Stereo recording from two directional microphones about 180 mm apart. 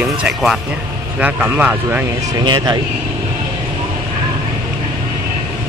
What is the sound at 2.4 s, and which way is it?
Speech, 20° right (ahead or behind).